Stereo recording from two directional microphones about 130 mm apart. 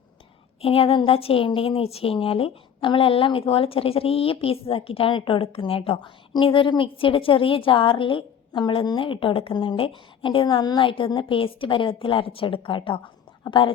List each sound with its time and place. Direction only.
0.6 s a woman's voice: 45° left (ahead or behind)